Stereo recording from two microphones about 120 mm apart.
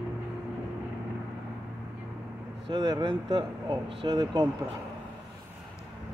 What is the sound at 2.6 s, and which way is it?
Speech, 35° right (ahead or behind).